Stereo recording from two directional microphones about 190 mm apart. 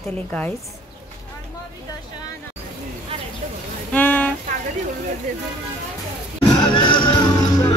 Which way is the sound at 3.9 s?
10° left (ahead or behind).